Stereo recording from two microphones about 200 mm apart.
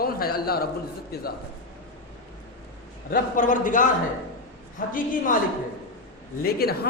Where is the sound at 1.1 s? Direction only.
50° left (ahead or behind).